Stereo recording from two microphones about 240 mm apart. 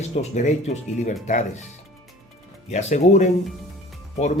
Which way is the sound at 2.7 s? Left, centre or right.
Left.